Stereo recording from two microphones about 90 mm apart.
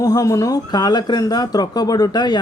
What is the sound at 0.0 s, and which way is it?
Speech, 40° left (ahead or behind).